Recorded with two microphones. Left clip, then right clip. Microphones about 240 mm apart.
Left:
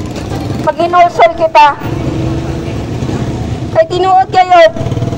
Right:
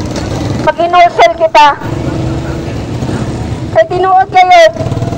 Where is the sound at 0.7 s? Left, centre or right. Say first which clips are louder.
Right 2 dB; right.